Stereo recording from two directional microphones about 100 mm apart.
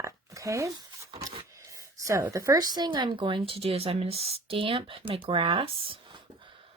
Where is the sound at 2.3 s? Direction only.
35° right (ahead or behind); by 6.0 s 65° right (ahead or behind).